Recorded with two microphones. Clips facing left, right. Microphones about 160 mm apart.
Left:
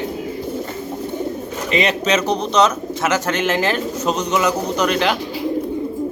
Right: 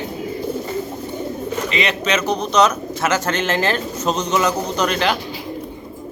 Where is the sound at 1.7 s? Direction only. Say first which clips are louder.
Left 5 dB; 40° left (ahead or behind).